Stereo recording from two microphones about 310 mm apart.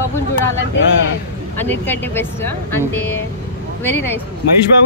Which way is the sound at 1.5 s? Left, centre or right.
Centre.